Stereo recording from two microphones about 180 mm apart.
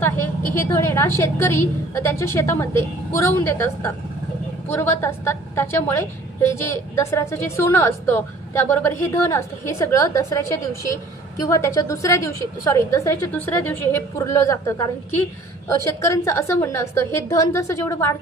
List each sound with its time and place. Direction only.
0.0 s a woman's voice: 15° left (ahead or behind)